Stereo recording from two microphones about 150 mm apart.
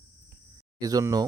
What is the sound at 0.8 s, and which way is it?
Speech, 25° right (ahead or behind).